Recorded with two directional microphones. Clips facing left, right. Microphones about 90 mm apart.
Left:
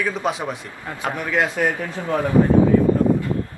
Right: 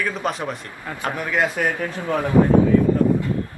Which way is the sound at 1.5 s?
10° left (ahead or behind).